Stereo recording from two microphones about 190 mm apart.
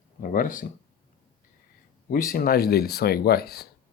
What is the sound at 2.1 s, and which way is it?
Speech, 50° left (ahead or behind).